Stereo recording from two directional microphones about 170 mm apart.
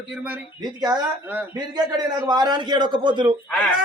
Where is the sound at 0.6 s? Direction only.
25° right (ahead or behind).